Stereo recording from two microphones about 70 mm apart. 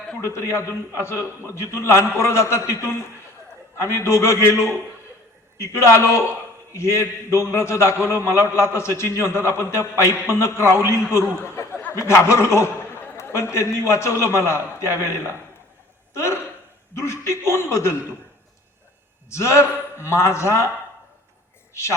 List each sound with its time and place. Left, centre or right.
0.3 s a man's voice: left
16.1 s a sound: left
16.9 s a man's voice: left
19.3 s a man's voice: left